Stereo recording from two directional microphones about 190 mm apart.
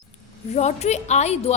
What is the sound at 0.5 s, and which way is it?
A woman's voice, 35° left (ahead or behind).